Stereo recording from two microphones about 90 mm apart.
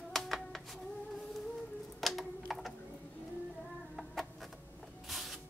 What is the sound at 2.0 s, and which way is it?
Typing, centre (ahead or behind).